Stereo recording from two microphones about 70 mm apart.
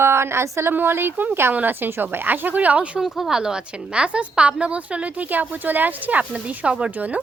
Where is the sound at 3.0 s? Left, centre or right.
Centre.